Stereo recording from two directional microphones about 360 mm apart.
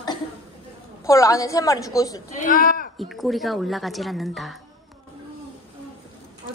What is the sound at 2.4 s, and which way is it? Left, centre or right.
Speech, left.